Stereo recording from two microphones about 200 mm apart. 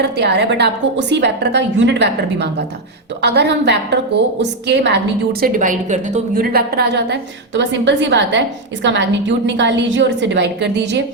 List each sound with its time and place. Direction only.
0.0 s a woman's voice: 55° right (ahead or behind)
5.4 s a woman's voice: 40° right (ahead or behind); by 11.0 s 60° right (ahead or behind)